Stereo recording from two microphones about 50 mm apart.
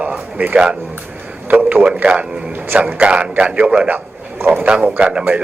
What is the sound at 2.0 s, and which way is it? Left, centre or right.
A man's voice, right.